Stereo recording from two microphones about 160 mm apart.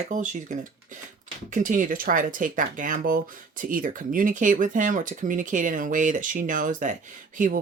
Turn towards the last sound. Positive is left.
turn(degrees=-55)  # may be behind; listen again after turning